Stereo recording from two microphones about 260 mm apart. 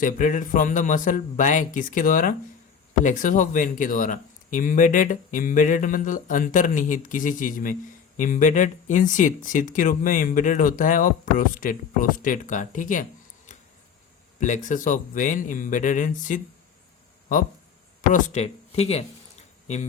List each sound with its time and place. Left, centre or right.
0.0 s speech: left
14.3 s speech: left
18.1 s speech: left